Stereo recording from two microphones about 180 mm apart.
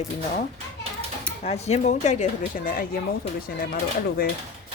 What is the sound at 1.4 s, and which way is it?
Speech, 35° left (ahead or behind).